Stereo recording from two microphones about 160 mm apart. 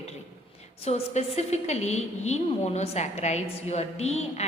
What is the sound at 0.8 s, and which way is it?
A woman's voice, 40° left (ahead or behind).